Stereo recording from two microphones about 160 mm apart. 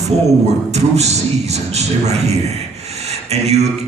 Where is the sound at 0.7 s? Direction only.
45° right (ahead or behind).